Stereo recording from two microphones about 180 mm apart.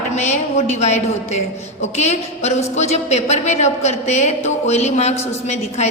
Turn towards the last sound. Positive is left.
turn(degrees=40)  # may be behind; listen again after turning